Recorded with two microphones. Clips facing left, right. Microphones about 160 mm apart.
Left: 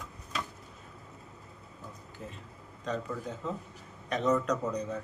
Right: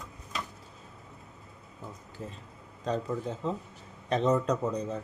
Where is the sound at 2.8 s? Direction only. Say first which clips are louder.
Right 4 dB; 30° right (ahead or behind).